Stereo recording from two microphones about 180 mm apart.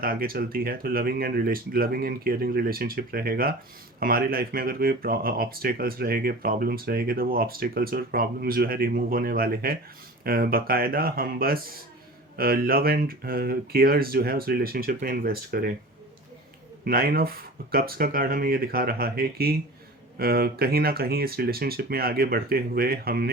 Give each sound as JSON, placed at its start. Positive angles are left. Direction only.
{"t": 0.0, "sound": "speech", "side_deg": -55}
{"t": 16.8, "sound": "speech", "side_deg": -55}